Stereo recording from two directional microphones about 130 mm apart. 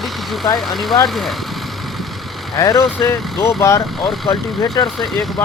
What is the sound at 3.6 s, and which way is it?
Speech, 20° left (ahead or behind).